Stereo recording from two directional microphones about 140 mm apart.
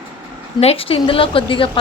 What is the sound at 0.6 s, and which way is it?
A woman's voice, 45° left (ahead or behind).